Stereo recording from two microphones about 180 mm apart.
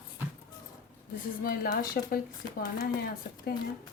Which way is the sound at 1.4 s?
55° left (ahead or behind).